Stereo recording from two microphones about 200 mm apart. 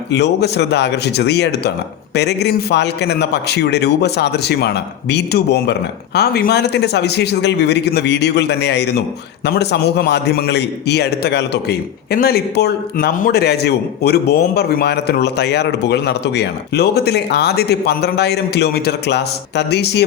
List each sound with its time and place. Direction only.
0.1 s a man's voice: 55° left (ahead or behind)